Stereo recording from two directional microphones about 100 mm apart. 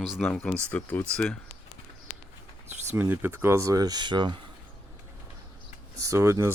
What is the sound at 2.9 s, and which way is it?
Speech, 20° right (ahead or behind).